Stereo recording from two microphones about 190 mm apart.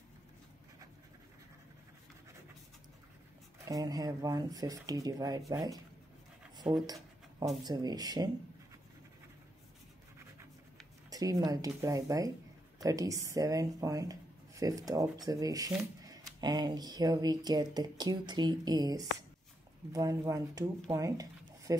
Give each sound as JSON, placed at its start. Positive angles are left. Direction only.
{"t": 3.6, "sound": "speech", "side_deg": -20}
{"t": 6.6, "sound": "a sound", "side_deg": -20}
{"t": 7.6, "sound": "speech", "side_deg": -20}
{"t": 11.1, "sound": "speech", "side_deg": -20}
{"t": 15.7, "sound": "shuffling cards", "side_deg": -15}
{"t": 16.3, "sound": "speech", "side_deg": -20}
{"t": 20.9, "sound": "a sound", "side_deg": -20}